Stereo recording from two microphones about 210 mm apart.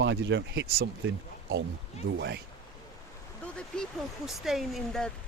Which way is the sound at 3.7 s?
5° left (ahead or behind).